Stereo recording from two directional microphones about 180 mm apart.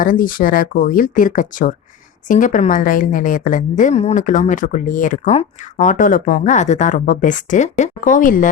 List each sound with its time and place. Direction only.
0.0 s a woman's voice: 50° left (ahead or behind)